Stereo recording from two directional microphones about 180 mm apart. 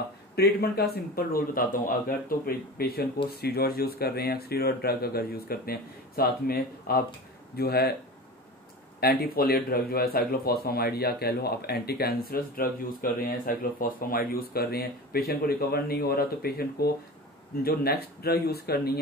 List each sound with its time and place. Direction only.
0.4 s speech: 60° left (ahead or behind)
9.0 s speech: 60° left (ahead or behind)